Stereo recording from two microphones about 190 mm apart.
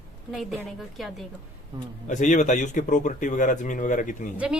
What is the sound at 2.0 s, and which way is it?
Speech, 40° left (ahead or behind).